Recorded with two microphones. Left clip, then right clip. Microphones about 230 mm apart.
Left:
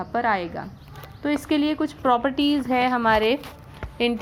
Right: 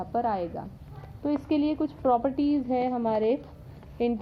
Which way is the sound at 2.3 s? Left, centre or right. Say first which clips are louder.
Left 5 dB; left.